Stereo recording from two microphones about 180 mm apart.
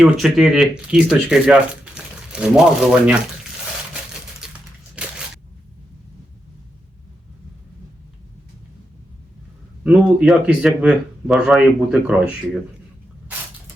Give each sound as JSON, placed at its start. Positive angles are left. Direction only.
{"t": 0.0, "sound": "speech", "side_deg": 0}
{"t": 3.9, "sound": "a sound", "side_deg": -5}
{"t": 9.8, "sound": "speech", "side_deg": -5}